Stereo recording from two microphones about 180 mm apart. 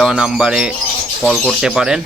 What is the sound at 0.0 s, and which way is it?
Speech, 5° right (ahead or behind).